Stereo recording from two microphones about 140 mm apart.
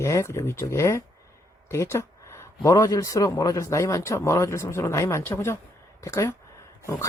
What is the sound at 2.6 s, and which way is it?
Speech, 25° left (ahead or behind).